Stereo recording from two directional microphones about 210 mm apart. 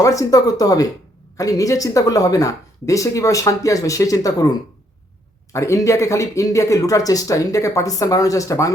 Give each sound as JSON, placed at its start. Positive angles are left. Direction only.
{"t": 0.0, "sound": "speech", "side_deg": 15}
{"t": 5.5, "sound": "speech", "side_deg": 15}